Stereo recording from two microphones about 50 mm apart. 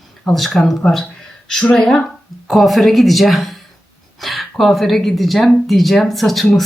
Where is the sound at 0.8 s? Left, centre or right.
Left.